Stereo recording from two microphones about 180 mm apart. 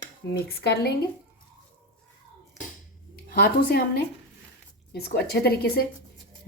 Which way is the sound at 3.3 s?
60° left (ahead or behind).